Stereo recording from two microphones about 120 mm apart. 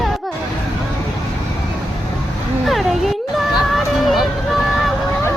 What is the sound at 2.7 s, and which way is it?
Music, centre (ahead or behind).